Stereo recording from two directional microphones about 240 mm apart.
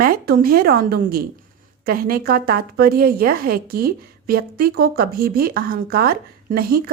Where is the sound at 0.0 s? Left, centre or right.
Right.